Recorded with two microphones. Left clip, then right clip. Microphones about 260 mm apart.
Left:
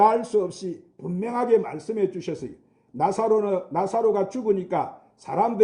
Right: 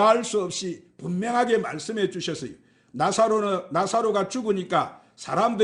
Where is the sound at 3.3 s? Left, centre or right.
Right.